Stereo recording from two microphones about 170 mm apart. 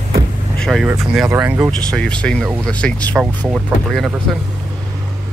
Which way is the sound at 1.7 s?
5° left (ahead or behind).